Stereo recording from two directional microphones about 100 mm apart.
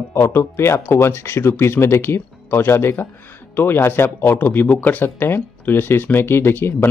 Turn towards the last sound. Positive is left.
turn(degrees=25)  # may be behind; listen again after turning